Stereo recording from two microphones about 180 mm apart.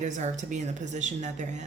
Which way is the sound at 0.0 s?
40° right (ahead or behind).